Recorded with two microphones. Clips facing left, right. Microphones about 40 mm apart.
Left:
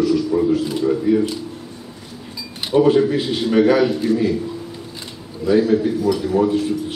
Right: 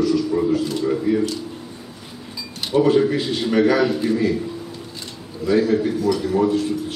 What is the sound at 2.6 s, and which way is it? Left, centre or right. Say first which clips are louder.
A man's voice: left 2 dB; centre.